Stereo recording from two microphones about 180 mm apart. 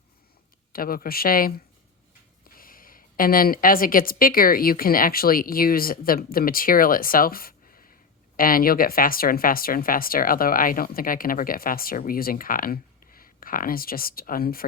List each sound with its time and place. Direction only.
0.7 s a woman's voice: 55° left (ahead or behind)